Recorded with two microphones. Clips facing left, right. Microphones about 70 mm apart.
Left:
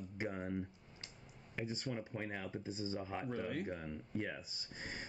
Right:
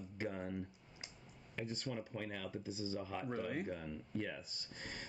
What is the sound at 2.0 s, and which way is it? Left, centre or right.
Speech, left.